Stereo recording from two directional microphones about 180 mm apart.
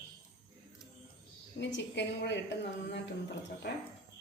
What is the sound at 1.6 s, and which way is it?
A woman's voice, 75° left (ahead or behind).